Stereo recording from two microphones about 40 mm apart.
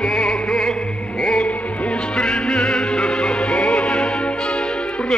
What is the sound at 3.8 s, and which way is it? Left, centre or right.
Music, centre.